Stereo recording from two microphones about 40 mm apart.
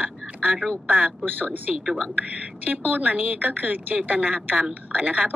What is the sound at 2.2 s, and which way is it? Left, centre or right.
Speech, right.